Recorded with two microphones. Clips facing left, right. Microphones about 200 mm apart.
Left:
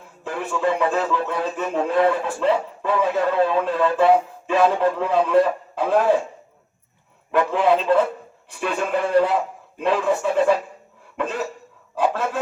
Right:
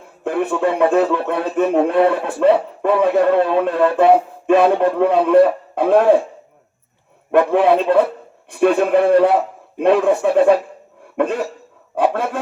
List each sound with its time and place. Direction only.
0.3 s a man's voice: 60° right (ahead or behind)
7.3 s a man's voice: 55° right (ahead or behind)